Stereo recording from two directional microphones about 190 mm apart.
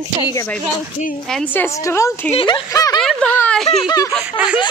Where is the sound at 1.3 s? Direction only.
10° left (ahead or behind).